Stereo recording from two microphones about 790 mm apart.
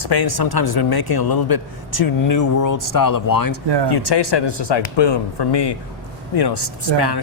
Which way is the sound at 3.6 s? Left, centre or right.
Right.